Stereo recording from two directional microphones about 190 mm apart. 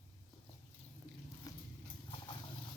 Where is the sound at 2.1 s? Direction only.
25° left (ahead or behind).